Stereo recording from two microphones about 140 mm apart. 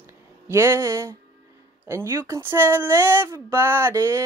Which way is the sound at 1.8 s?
20° right (ahead or behind).